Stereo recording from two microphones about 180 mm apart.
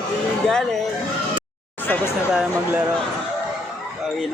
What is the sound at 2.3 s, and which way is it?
Speech, 5° right (ahead or behind).